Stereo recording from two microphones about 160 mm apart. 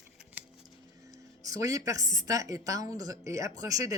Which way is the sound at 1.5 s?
20° right (ahead or behind).